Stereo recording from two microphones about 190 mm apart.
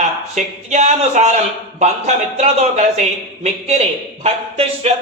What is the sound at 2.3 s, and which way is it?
Speech, 35° right (ahead or behind).